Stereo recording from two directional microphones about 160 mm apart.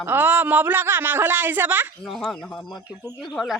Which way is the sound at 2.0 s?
Centre (ahead or behind).